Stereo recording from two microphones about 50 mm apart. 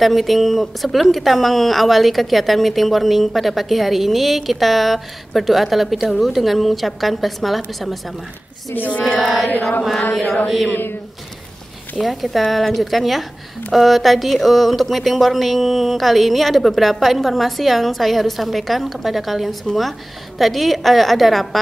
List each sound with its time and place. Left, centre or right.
0.0 s a woman's voice: centre
9.2 s a woman's voice: centre
9.5 s chant: left
10.1 s a woman's voice: centre
10.7 s speech: left
12.0 s a woman's voice: centre